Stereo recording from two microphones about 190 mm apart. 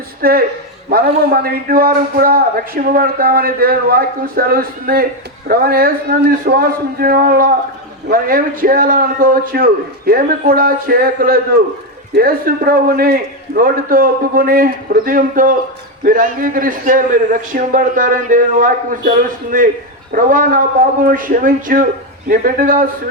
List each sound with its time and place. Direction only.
0.2 s a man's voice: 50° right (ahead or behind)